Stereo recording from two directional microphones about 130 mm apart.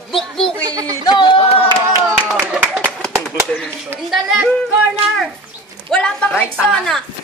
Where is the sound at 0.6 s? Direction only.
30° right (ahead or behind).